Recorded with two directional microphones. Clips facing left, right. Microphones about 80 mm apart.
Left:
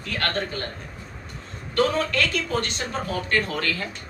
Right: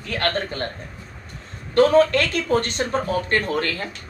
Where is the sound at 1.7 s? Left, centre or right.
Right.